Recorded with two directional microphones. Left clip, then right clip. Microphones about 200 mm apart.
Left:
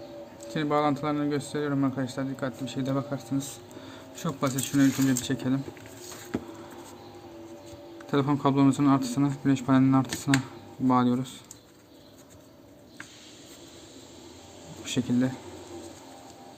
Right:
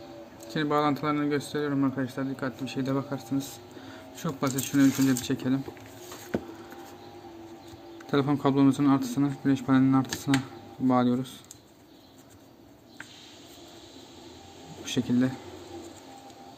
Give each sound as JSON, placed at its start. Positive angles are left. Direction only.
{"t": 0.4, "sound": "a man's voice", "side_deg": 0}
{"t": 7.9, "sound": "a man's voice", "side_deg": 0}
{"t": 14.8, "sound": "speech", "side_deg": 0}